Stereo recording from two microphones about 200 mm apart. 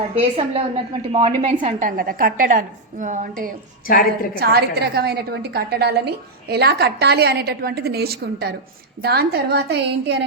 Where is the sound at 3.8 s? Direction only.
45° left (ahead or behind).